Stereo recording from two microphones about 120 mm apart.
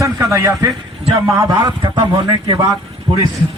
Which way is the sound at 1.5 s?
40° right (ahead or behind).